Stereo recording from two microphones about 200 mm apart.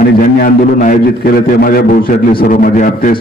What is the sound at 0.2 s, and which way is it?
A man's voice, 40° left (ahead or behind).